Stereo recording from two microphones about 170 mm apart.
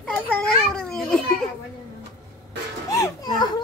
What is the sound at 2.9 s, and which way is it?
Children playing, 20° left (ahead or behind).